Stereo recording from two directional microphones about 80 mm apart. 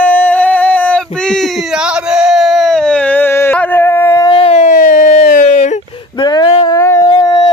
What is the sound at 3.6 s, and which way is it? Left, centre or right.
Howl, left.